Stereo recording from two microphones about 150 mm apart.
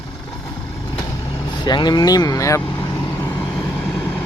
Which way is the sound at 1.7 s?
30° left (ahead or behind).